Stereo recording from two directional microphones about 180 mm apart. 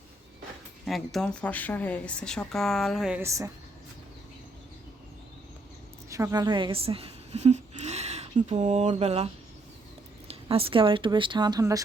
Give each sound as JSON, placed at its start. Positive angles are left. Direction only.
{"t": 0.9, "sound": "speech", "side_deg": 0}
{"t": 3.2, "sound": "speech", "side_deg": -15}
{"t": 6.1, "sound": "a woman's voice", "side_deg": -15}